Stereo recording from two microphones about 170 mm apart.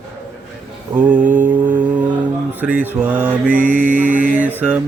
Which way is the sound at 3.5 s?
50° right (ahead or behind).